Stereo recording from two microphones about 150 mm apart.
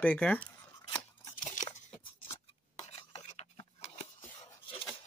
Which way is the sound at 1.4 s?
55° left (ahead or behind).